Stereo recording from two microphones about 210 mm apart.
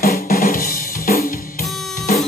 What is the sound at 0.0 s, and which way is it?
Drum, 45° left (ahead or behind).